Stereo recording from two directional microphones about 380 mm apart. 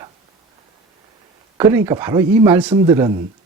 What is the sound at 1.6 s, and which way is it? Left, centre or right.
Speech, centre.